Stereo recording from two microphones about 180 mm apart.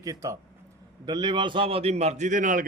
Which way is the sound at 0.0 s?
20° right (ahead or behind).